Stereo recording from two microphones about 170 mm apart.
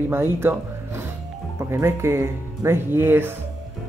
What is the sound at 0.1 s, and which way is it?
Speech, 15° right (ahead or behind).